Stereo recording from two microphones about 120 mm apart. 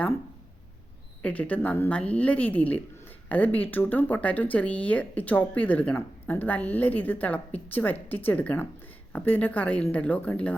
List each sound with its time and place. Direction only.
1.2 s speech: 10° left (ahead or behind)